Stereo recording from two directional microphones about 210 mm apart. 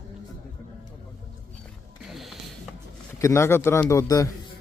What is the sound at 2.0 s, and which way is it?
Mechanisms, centre (ahead or behind).